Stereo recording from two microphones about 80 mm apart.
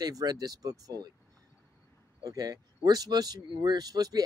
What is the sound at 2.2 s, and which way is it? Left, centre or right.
Speech, right.